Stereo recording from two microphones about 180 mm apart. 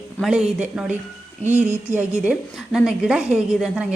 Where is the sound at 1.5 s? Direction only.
40° right (ahead or behind).